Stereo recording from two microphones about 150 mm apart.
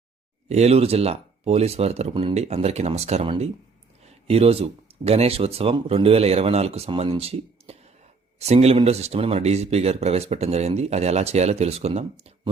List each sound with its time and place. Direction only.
0.4 s speech: 45° right (ahead or behind)